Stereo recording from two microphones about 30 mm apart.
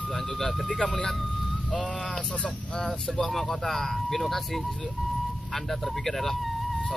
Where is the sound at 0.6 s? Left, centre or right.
Left.